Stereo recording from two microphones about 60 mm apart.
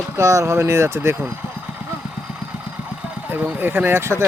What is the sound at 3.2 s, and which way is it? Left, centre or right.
Speech, right.